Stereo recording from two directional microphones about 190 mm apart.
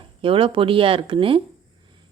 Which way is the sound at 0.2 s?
30° right (ahead or behind).